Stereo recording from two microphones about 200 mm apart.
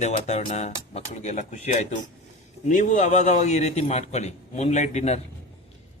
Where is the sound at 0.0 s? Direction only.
35° left (ahead or behind).